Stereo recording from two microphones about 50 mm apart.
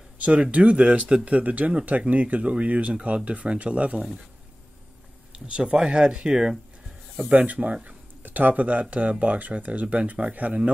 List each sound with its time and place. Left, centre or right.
0.2 s speech: right
5.5 s speech: centre
7.2 s speech: right